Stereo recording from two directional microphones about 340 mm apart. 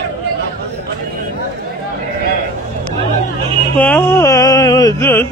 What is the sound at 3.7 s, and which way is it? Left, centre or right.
Music, centre.